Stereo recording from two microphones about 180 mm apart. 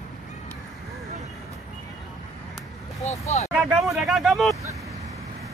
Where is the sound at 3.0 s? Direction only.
40° left (ahead or behind).